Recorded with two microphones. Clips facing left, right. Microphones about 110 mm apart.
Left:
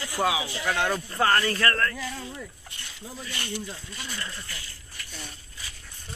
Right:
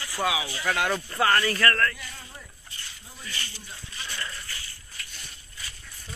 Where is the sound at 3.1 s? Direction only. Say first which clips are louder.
Left 6 dB; 60° left (ahead or behind); by 3.8 s 75° left (ahead or behind).